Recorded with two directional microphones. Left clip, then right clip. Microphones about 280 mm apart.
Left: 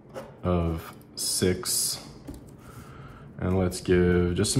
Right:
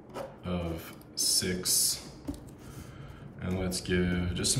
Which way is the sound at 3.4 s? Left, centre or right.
Centre.